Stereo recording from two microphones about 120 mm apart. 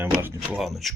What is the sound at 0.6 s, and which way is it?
Speech, centre (ahead or behind).